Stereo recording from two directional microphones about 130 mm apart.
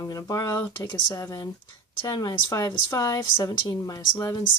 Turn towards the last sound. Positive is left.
turn(degrees=25)  # may be behind; listen again after turning